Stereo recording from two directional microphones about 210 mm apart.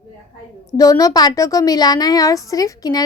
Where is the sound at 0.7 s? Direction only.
15° left (ahead or behind).